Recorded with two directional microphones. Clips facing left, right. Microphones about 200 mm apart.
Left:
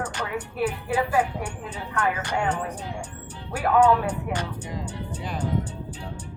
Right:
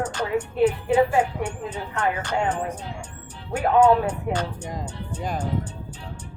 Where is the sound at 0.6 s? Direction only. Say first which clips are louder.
Right 6 dB; 20° right (ahead or behind).